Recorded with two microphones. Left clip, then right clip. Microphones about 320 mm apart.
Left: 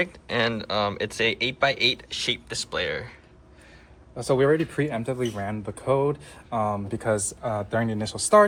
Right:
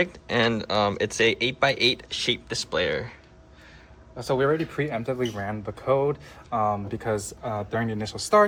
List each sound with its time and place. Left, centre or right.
0.0 s speech: centre
4.2 s speech: left